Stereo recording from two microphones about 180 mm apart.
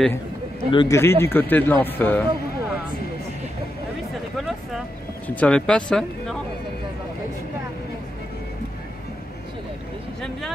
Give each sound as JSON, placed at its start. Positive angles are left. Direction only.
{"t": 0.7, "sound": "a man's voice", "side_deg": 25}
{"t": 0.9, "sound": "speech", "side_deg": 15}
{"t": 5.3, "sound": "speech", "side_deg": 5}